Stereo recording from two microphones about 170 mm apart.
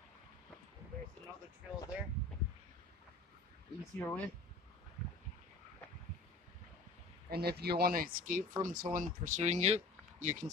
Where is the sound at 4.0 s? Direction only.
10° left (ahead or behind).